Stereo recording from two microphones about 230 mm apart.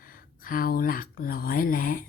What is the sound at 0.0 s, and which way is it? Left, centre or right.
Speech, left.